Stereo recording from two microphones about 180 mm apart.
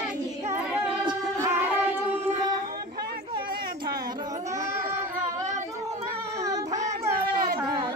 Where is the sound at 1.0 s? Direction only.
15° right (ahead or behind).